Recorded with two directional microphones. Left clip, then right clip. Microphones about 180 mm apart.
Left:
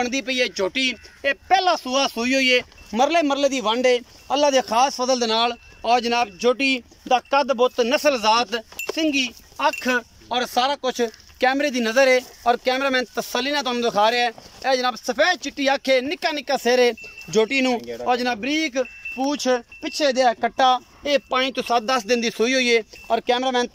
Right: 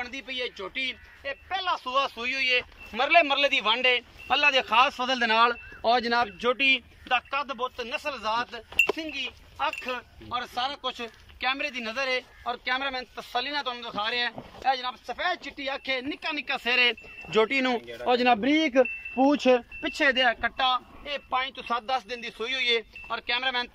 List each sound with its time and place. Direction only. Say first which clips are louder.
0.0 s speech: left 11 dB; 60° left (ahead or behind); by 6.8 s 20° left (ahead or behind)
7.1 s speech: left 9 dB; 45° left (ahead or behind)
17.3 s speech: left 4 dB; 15° left (ahead or behind)
18.0 s a man's voice: even; centre (ahead or behind)
20.0 s speech: left 4 dB; 20° left (ahead or behind)
20.3 s speech: left 7 dB; 40° left (ahead or behind)